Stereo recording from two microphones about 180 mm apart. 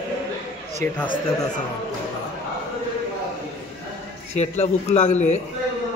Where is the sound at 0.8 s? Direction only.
45° right (ahead or behind).